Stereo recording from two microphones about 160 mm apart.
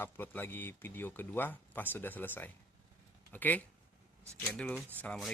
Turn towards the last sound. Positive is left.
turn(degrees=10)  # may be behind; listen again after turning